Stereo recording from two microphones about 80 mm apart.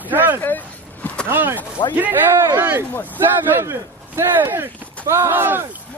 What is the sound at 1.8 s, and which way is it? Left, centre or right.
Speech, left.